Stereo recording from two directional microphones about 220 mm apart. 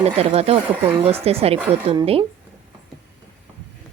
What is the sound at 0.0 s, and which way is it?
Speech, 30° right (ahead or behind).